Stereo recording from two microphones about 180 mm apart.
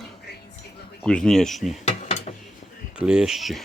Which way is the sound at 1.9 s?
40° left (ahead or behind).